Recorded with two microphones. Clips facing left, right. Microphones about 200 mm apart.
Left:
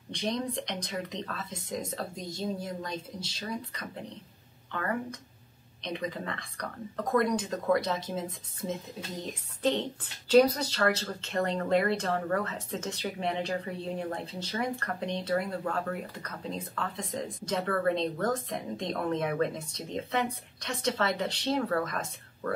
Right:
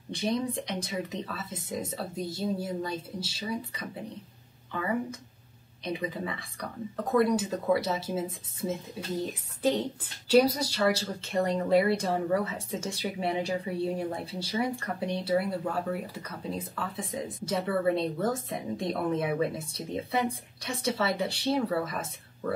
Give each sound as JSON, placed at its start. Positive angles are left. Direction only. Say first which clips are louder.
{"t": 0.1, "sound": "a woman's voice", "louder": "right 3 dB", "side_deg": -5}
{"t": 5.8, "sound": "a woman's voice", "louder": "right 2 dB", "side_deg": -5}